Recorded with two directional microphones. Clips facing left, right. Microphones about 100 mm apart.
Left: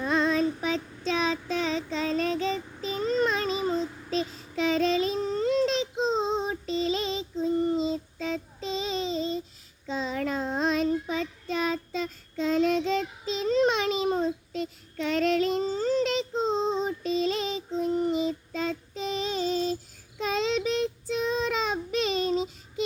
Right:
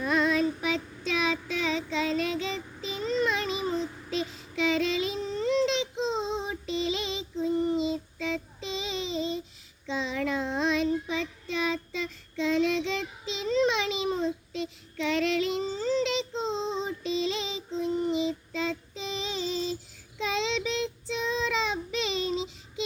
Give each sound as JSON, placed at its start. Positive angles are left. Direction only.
{"t": 0.0, "sound": "child singing", "side_deg": 30}